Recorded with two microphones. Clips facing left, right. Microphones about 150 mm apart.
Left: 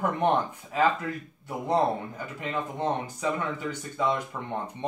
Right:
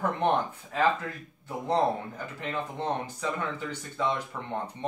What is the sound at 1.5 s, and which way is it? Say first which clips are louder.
Speech: left 1 dB; 10° left (ahead or behind).